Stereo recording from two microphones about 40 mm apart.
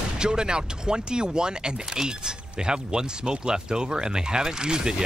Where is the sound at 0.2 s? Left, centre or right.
Right.